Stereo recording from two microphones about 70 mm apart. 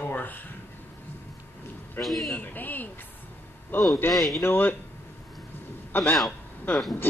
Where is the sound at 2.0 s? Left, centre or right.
Centre.